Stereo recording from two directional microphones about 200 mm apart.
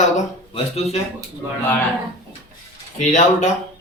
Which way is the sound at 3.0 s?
35° left (ahead or behind).